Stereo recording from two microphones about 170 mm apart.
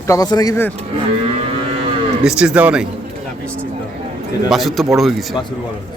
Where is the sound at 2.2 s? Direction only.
5° right (ahead or behind).